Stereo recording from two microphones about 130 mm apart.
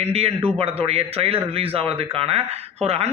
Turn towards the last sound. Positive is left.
turn(degrees=-50)  # may be behind; listen again after turning